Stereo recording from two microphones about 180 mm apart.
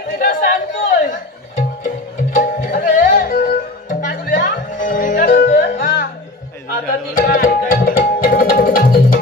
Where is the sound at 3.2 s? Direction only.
50° left (ahead or behind).